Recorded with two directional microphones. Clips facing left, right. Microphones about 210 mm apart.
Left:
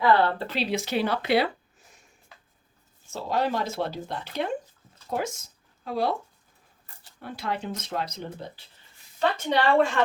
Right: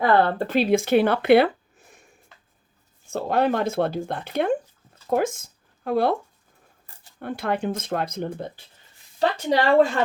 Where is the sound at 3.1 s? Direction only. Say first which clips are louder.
Right 5 dB; 55° right (ahead or behind).